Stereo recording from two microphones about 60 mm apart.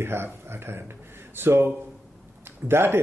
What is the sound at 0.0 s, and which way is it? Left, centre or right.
Speech, right.